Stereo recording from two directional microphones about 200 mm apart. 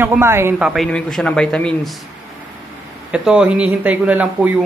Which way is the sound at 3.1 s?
5° right (ahead or behind).